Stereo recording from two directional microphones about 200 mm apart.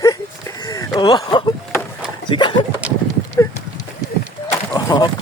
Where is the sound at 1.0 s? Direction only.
20° left (ahead or behind).